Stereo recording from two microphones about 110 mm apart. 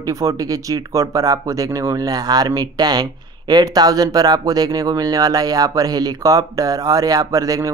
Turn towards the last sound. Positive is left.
turn(degrees=-30)  # may be behind; listen again after turning